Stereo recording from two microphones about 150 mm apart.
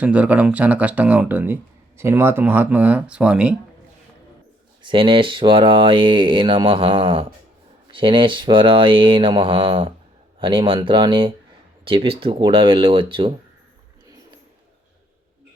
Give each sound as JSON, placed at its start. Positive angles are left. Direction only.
{"t": 0.0, "sound": "speech", "side_deg": -10}
{"t": 4.8, "sound": "speech", "side_deg": -35}